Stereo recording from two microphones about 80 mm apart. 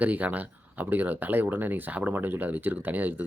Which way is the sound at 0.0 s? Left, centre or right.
Right.